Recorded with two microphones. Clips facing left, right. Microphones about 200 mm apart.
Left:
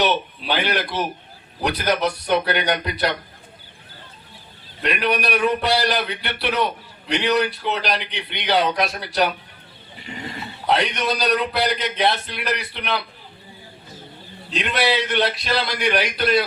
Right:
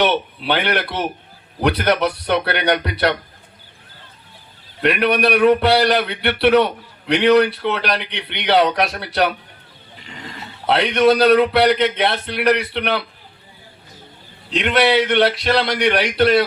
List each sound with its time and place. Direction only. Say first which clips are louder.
0.0 s speech: right 3 dB; 60° right (ahead or behind)
4.8 s speech: right 6 dB; 60° right (ahead or behind)
10.1 s a sound: left 3 dB; 10° left (ahead or behind)
10.7 s speech: right 7 dB; 60° right (ahead or behind)
14.6 s speech: right 6 dB; 60° right (ahead or behind)